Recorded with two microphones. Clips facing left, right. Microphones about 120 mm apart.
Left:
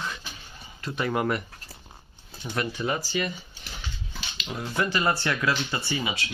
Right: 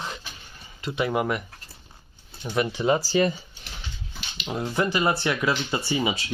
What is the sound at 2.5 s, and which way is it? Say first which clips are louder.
Speech: right 6 dB; 20° right (ahead or behind).